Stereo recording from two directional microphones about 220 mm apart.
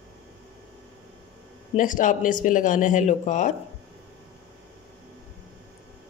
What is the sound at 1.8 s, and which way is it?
Speech, 35° left (ahead or behind).